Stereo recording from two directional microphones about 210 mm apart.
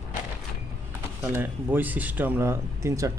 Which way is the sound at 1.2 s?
10° right (ahead or behind).